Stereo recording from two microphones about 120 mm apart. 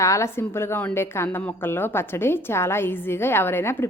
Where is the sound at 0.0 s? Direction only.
25° left (ahead or behind).